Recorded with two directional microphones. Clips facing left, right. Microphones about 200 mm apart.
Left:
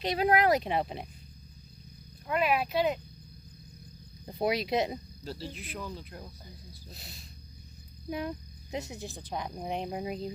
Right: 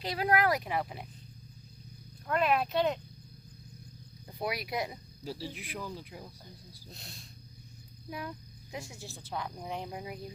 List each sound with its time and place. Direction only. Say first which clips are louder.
0.0 s speech: left 3 dB; 20° left (ahead or behind)
2.2 s speech: even; 5° left (ahead or behind)
4.3 s speech: left 7 dB; 25° left (ahead or behind)
5.2 s speech: even; 10° right (ahead or behind)
8.7 s speech: left 6 dB; 20° left (ahead or behind)